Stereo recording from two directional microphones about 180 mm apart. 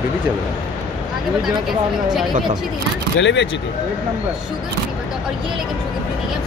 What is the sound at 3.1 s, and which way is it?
Speech, 90° left.